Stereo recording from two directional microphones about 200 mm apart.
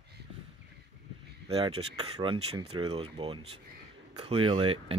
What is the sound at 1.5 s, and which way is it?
Speech, 30° right (ahead or behind).